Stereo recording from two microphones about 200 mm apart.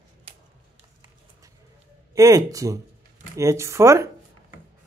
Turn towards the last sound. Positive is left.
turn(degrees=-15)  # may be behind; listen again after turning